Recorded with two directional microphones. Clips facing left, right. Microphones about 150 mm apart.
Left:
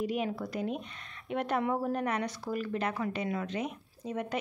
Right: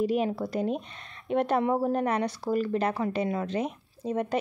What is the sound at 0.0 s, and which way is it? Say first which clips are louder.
Speech: right 6 dB; 35° right (ahead or behind).